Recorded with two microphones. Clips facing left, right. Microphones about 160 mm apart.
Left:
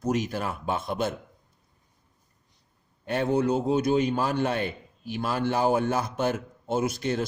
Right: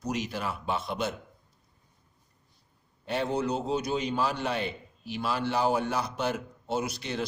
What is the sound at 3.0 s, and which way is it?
A man's voice, 50° left (ahead or behind).